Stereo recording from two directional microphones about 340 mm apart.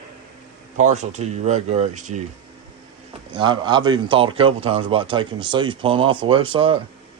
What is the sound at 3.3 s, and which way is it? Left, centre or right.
A man's voice, centre.